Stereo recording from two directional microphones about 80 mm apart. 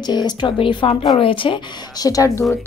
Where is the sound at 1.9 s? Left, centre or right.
Left.